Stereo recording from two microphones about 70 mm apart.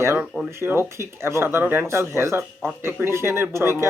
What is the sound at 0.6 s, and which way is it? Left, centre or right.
Speech, right.